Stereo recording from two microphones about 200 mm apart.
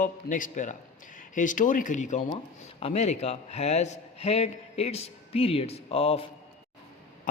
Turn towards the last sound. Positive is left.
turn(degrees=30)  # may be behind; listen again after turning